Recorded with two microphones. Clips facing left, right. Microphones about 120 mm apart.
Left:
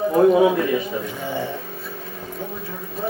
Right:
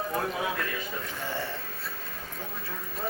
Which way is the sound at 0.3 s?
60° left (ahead or behind).